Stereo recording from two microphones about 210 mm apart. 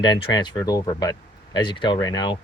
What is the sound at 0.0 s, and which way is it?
Speech, 20° left (ahead or behind).